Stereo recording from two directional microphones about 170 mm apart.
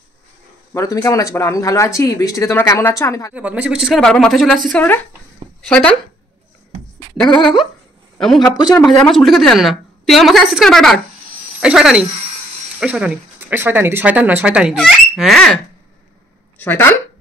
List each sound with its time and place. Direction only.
0.7 s speech: 20° left (ahead or behind)
3.3 s a woman's voice: 10° right (ahead or behind)
7.2 s speech: 30° left (ahead or behind)
9.1 s a woman's voice: centre (ahead or behind)